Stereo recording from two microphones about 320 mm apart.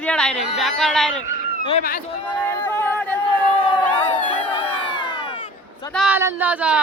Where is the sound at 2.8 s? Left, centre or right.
Centre.